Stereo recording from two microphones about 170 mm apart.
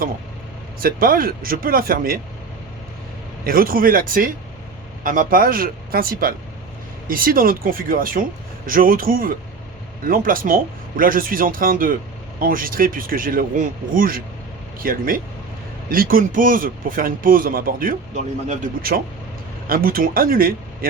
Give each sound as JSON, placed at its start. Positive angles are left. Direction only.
{"t": 0.8, "sound": "speech", "side_deg": -60}
{"t": 3.4, "sound": "speech", "side_deg": -60}